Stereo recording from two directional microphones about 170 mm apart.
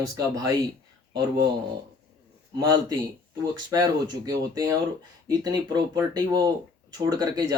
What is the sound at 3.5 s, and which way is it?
Speech, 25° right (ahead or behind).